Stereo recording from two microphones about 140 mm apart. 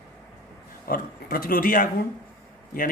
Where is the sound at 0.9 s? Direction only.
90° left.